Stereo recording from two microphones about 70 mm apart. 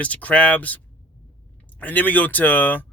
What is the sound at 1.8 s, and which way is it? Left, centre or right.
Speech, left.